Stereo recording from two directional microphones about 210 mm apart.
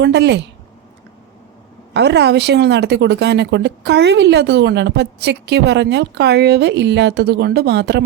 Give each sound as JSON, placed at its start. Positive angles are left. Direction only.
{"t": 0.0, "sound": "speech", "side_deg": -55}
{"t": 1.9, "sound": "speech", "side_deg": -55}